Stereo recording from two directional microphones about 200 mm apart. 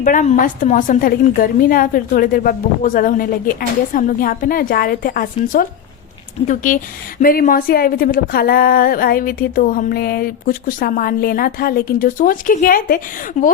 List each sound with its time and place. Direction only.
0.0 s speech: 40° left (ahead or behind)
13.4 s speech: 35° left (ahead or behind)